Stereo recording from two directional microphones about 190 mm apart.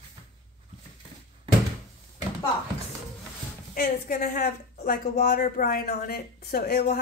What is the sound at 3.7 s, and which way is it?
Speech, 50° left (ahead or behind).